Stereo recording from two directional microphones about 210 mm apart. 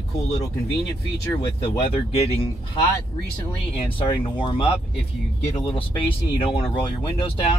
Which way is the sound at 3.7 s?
25° left (ahead or behind).